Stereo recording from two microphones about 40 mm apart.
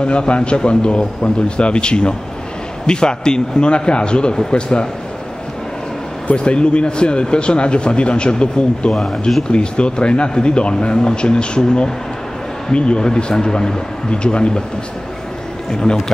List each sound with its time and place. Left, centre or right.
0.0 s speech: left
6.3 s speech: left
9.5 s speech: left
15.8 s speech: centre